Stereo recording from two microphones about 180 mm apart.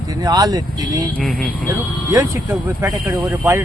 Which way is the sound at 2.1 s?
15° right (ahead or behind).